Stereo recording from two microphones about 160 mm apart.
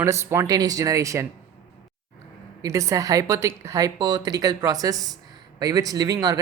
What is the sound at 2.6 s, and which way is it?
Speech, 20° right (ahead or behind).